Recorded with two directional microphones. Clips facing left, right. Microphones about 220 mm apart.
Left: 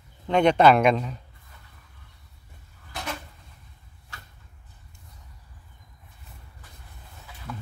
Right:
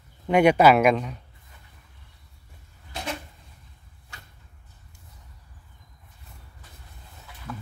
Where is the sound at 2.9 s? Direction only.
25° right (ahead or behind).